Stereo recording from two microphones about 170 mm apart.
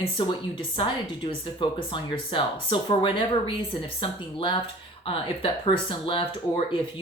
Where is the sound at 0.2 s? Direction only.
30° left (ahead or behind).